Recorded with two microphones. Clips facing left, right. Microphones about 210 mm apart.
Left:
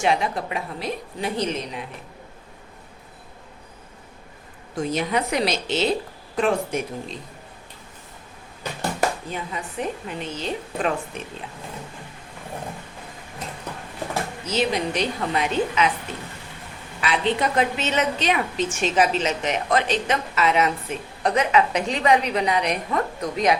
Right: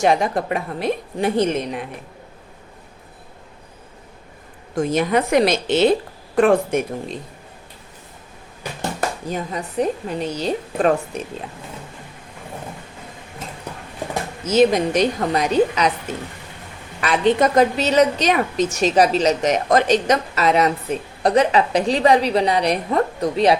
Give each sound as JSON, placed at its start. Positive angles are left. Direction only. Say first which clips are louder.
{"t": 0.0, "sound": "a woman's voice", "louder": "right 5 dB", "side_deg": -45}
{"t": 4.8, "sound": "a woman's voice", "louder": "right 5 dB", "side_deg": -50}
{"t": 9.2, "sound": "a woman's voice", "louder": "right 5 dB", "side_deg": -40}
{"t": 14.4, "sound": "a woman's voice", "louder": "right 9 dB", "side_deg": -45}
{"t": 17.0, "sound": "a woman's voice", "louder": "right 6 dB", "side_deg": -45}